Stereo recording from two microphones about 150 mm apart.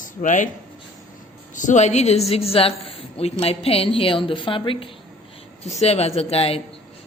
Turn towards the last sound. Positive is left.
turn(degrees=40)  # may be behind; listen again after turning